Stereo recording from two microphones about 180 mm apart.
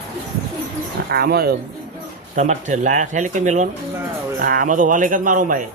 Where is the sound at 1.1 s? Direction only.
60° right (ahead or behind).